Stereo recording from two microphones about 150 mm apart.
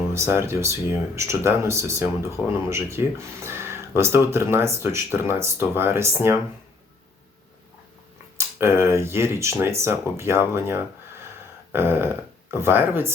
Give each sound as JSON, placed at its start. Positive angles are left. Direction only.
{"t": 0.1, "sound": "speech", "side_deg": -15}
{"t": 8.4, "sound": "speech", "side_deg": -15}